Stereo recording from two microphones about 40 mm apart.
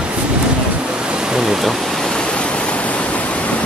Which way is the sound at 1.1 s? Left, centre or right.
Centre.